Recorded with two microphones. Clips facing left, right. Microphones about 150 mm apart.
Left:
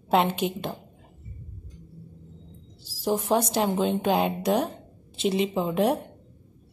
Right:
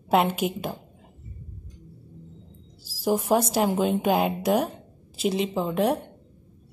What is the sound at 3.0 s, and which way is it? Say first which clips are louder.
A woman's voice: right 2 dB; 5° right (ahead or behind).